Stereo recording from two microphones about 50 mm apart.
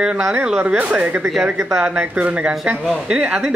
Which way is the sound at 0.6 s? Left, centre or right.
Right.